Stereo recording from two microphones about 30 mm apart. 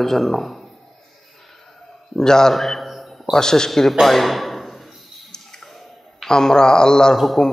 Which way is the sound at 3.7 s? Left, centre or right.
Centre.